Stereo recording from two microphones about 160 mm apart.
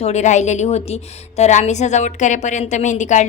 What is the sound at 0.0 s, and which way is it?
A woman's voice, 45° left (ahead or behind).